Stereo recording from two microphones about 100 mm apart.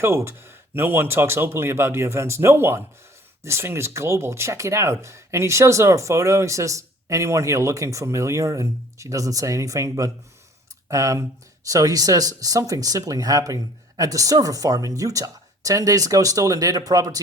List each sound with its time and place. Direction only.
0.0 s speech: 25° right (ahead or behind)